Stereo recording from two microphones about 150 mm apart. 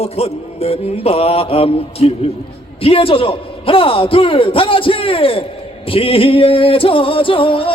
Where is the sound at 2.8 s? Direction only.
40° left (ahead or behind).